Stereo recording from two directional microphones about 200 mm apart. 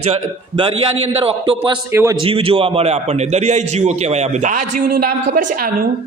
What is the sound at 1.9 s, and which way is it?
Speech, 15° right (ahead or behind).